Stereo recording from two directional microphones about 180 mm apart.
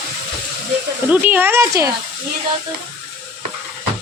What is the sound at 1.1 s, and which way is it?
Speech, 10° right (ahead or behind).